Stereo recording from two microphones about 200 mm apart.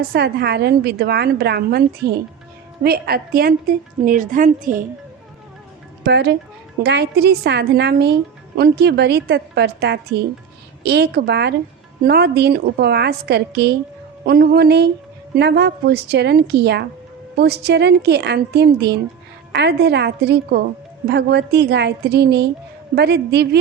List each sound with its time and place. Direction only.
0.0 s a woman's voice: 55° right (ahead or behind)
6.1 s a woman's voice: 55° right (ahead or behind)